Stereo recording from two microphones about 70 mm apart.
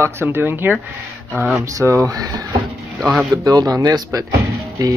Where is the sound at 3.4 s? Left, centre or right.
Right.